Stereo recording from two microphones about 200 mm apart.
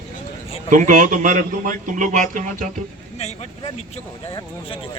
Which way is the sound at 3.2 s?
30° left (ahead or behind).